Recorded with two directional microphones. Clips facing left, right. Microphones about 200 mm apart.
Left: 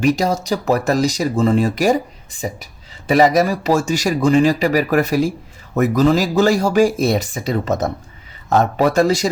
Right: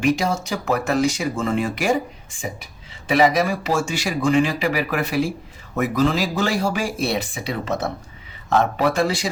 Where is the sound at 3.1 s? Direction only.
40° left (ahead or behind).